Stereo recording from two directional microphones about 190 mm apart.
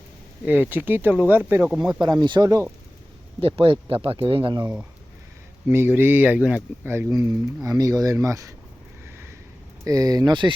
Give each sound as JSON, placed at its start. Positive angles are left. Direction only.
{"t": 0.4, "sound": "speech", "side_deg": -10}
{"t": 2.0, "sound": "speech", "side_deg": -25}
{"t": 3.4, "sound": "speech", "side_deg": -30}
{"t": 4.6, "sound": "speech", "side_deg": -10}
{"t": 9.0, "sound": "a sound", "side_deg": -15}
{"t": 9.8, "sound": "speech", "side_deg": -20}